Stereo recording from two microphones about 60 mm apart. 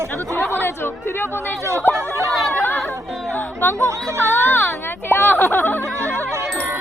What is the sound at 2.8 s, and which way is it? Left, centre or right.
Music, left.